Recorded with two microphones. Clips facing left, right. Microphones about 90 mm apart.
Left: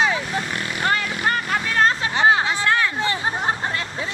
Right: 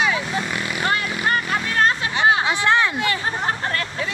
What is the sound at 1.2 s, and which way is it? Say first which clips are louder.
Vehicle: right 1 dB; 40° left (ahead or behind).